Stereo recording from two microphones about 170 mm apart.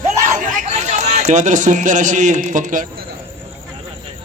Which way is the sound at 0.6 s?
45° right (ahead or behind).